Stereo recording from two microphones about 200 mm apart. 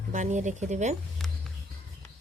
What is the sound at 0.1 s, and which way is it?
Speech, 35° right (ahead or behind).